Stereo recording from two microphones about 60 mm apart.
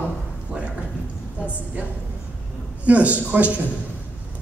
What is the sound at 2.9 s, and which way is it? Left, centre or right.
Speech, right.